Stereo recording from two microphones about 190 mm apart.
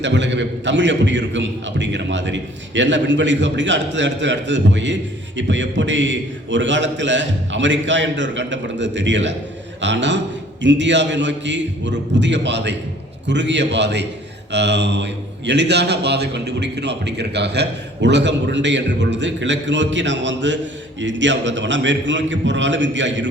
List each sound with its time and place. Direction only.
0.0 s a man's voice: 70° right (ahead or behind)